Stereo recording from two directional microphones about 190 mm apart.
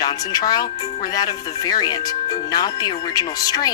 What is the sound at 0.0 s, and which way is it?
Speech, 20° left (ahead or behind).